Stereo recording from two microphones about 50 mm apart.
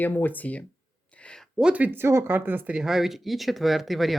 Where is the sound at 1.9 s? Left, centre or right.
Right.